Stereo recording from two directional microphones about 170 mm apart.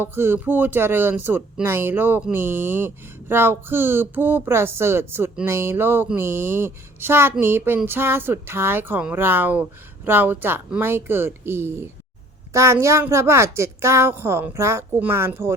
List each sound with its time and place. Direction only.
0.0 s speech: 15° right (ahead or behind)